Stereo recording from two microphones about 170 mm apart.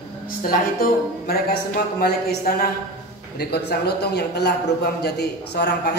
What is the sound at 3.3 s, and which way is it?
A man's voice, 70° left (ahead or behind).